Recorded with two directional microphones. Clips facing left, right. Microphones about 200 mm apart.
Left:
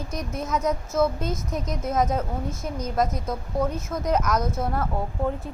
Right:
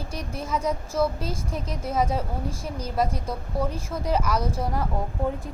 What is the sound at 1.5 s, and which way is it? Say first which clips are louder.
Speech: left 2 dB; 30° right (ahead or behind).